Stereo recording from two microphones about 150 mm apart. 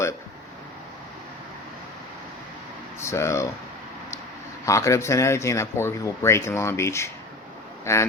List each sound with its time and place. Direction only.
3.0 s speech: 20° left (ahead or behind)
4.6 s speech: 20° left (ahead or behind)